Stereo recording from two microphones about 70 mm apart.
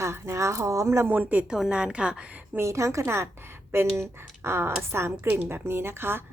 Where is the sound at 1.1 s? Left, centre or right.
Right.